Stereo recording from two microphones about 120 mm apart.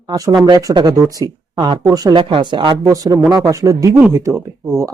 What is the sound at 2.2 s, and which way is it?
Speech, 45° right (ahead or behind).